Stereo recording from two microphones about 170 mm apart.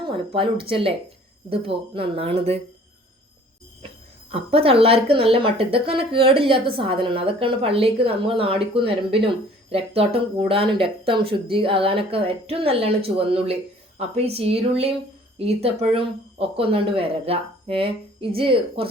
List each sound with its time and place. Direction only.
0.0 s a woman's voice: 30° right (ahead or behind)
4.3 s a woman's voice: 35° right (ahead or behind)